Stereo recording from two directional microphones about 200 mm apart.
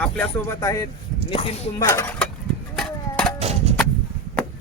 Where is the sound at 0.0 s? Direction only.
10° left (ahead or behind).